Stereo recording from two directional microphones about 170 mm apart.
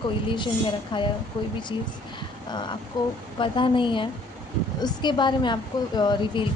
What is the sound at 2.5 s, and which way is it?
A woman's voice, 25° left (ahead or behind).